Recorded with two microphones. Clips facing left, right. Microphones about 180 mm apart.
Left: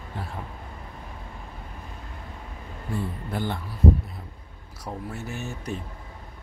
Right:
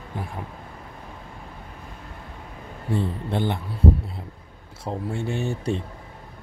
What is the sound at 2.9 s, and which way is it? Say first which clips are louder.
Speech: right 5 dB; 25° right (ahead or behind).